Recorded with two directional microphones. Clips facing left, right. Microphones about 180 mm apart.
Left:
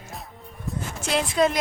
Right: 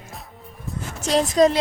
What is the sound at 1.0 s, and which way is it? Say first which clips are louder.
Speech: right 5 dB; 40° right (ahead or behind).